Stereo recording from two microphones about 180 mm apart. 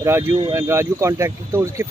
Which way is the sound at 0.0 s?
15° right (ahead or behind).